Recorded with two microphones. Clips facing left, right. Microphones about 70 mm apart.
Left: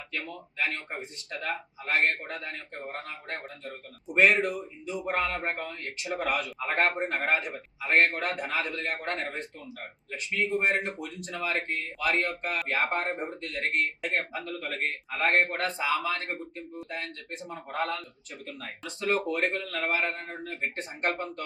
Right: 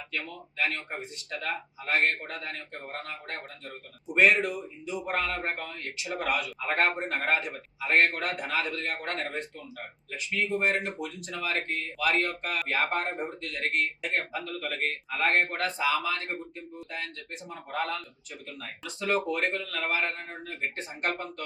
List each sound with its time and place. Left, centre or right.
0.1 s speech: left
4.1 s a man's voice: left
17.5 s a man's voice: left
20.4 s a man's voice: left